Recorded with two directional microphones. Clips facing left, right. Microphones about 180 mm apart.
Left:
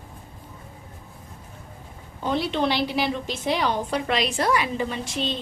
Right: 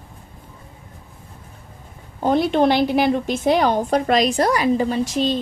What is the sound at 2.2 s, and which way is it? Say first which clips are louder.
A woman's voice: right 7 dB; 45° right (ahead or behind).